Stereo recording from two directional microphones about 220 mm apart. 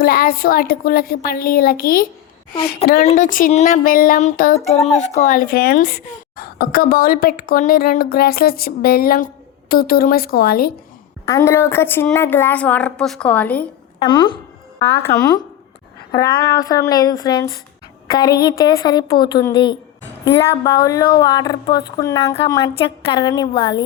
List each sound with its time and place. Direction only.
0.0 s a woman's voice: 45° left (ahead or behind)
4.6 s a woman's voice: 30° left (ahead or behind)
11.3 s a woman's voice: 10° left (ahead or behind)
14.0 s a woman's voice: 20° left (ahead or behind)
14.8 s a woman's voice: 10° left (ahead or behind)
20.2 s a woman's voice: 50° left (ahead or behind)
20.8 s a woman's voice: 15° left (ahead or behind)